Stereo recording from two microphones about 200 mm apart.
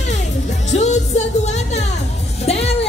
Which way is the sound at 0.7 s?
35° left (ahead or behind).